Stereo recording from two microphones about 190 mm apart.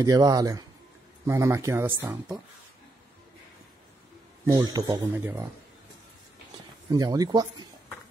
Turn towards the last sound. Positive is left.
turn(degrees=-20)  # may be behind; listen again after turning